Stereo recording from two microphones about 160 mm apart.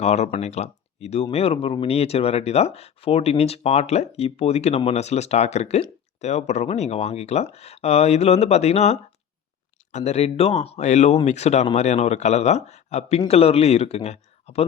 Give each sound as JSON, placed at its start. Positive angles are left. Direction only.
{"t": 0.0, "sound": "speech", "side_deg": 45}